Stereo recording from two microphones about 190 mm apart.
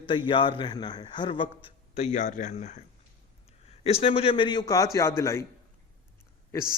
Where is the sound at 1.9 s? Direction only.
40° left (ahead or behind); by 5.5 s 15° left (ahead or behind).